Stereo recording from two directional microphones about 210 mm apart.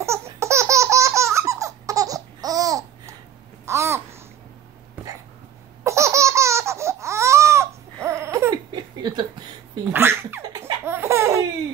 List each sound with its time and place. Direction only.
0.0 s laughter: 15° right (ahead or behind)
3.6 s babbling: 15° right (ahead or behind)
5.9 s laughter: 15° right (ahead or behind)
9.0 s a sound: 20° right (ahead or behind)
9.9 s laughter: 10° right (ahead or behind)